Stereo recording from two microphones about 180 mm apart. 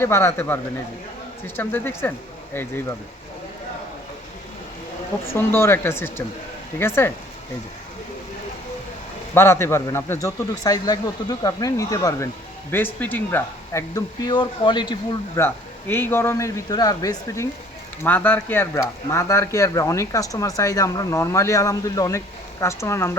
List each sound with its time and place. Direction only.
0.0 s speech: 15° left (ahead or behind)
5.2 s speech: 15° left (ahead or behind)
9.3 s speech: 15° left (ahead or behind)
15.4 s speech: 10° left (ahead or behind)